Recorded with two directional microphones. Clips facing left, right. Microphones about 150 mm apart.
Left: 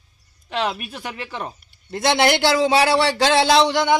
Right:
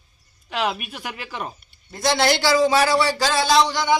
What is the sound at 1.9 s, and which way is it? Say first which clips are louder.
A man's voice: left 2 dB; 60° left (ahead or behind).